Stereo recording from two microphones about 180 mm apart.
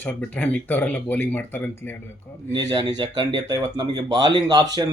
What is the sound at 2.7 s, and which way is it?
Speech, 25° right (ahead or behind).